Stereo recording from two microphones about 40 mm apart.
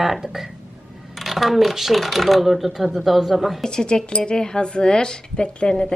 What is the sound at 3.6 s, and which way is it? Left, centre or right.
Speech, centre.